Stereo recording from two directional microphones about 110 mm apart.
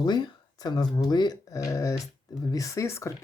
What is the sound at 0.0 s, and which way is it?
Speech, 40° left (ahead or behind).